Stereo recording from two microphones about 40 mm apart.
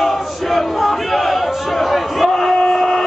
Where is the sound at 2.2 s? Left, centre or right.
Centre.